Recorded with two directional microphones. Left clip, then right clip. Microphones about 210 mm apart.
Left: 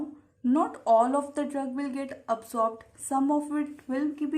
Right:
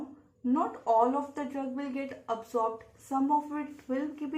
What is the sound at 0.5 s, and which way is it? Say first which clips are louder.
Speech: left 4 dB; 40° left (ahead or behind).